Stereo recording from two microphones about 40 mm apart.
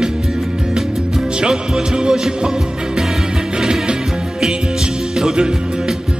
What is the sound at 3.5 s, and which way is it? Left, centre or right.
Music, right.